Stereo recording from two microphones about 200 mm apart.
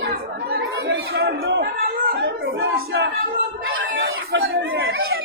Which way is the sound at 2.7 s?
50° right (ahead or behind).